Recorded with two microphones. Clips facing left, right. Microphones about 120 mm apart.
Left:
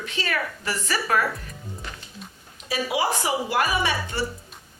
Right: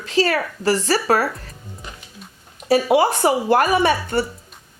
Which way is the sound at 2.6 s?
55° right (ahead or behind).